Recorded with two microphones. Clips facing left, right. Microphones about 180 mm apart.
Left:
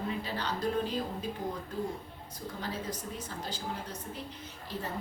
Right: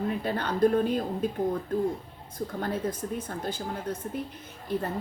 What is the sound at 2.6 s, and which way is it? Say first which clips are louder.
A woman's voice: right 7 dB; 55° right (ahead or behind).